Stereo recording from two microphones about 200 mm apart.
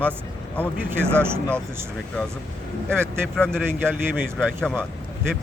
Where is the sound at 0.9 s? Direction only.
10° right (ahead or behind).